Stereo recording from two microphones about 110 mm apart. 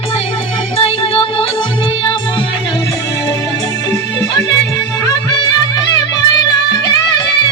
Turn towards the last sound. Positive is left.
turn(degrees=40)  # may be behind; listen again after turning